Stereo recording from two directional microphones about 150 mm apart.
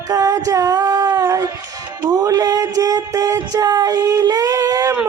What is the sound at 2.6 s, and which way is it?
Child singing, 25° right (ahead or behind).